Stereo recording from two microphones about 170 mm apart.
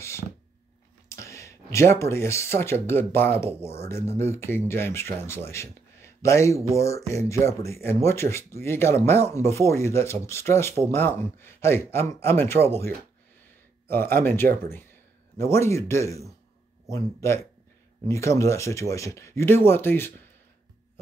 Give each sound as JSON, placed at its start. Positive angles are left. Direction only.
{"t": 1.0, "sound": "speech", "side_deg": 15}
{"t": 13.8, "sound": "speech", "side_deg": 15}